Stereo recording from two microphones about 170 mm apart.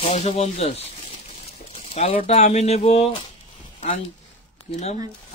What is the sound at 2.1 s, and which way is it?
Speech, 40° left (ahead or behind).